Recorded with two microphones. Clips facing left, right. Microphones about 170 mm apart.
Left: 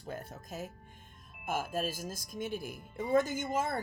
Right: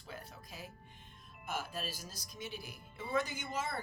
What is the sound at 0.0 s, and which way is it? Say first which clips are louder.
Speech: left 7 dB; 50° left (ahead or behind).